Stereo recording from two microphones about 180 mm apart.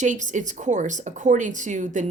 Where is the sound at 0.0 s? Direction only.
45° right (ahead or behind).